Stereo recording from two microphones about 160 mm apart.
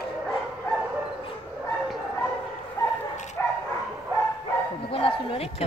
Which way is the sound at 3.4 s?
15° left (ahead or behind).